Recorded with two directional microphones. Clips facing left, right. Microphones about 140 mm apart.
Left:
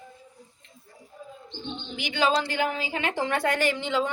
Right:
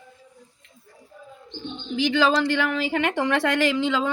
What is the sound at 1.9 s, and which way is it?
A woman's voice, 90° right.